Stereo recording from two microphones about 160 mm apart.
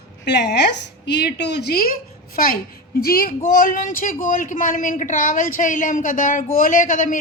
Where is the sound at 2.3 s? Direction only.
65° left (ahead or behind).